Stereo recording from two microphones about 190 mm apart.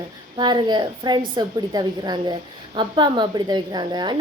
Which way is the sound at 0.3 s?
25° right (ahead or behind).